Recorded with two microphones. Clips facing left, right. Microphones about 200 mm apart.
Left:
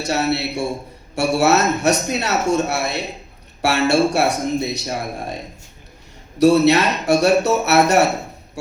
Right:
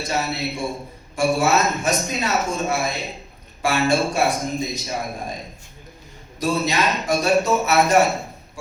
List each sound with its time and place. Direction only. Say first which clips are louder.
0.0 s speech: left 5 dB; 70° left (ahead or behind)
6.4 s speech: left 9 dB; 70° left (ahead or behind)